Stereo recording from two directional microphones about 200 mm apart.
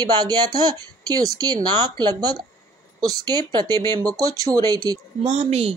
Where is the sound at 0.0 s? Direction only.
20° right (ahead or behind).